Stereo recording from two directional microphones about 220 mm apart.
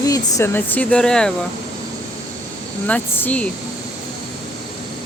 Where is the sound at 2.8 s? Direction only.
5° left (ahead or behind).